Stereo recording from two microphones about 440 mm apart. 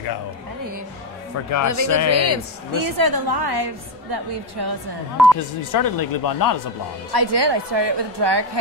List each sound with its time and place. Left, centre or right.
1.5 s speech: left
2.0 s a man's voice: right
2.7 s a woman's voice: right
5.2 s speech: centre
5.6 s speech: left
7.1 s a woman's voice: right